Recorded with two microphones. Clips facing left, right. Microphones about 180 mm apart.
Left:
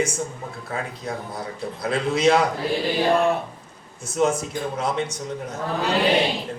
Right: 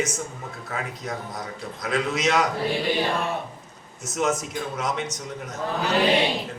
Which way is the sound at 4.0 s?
30° left (ahead or behind).